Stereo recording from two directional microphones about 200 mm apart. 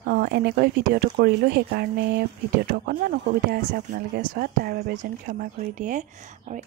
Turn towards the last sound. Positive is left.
turn(degrees=-40)  # may be behind; listen again after turning